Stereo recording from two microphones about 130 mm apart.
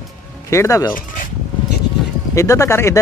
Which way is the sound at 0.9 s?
90° left.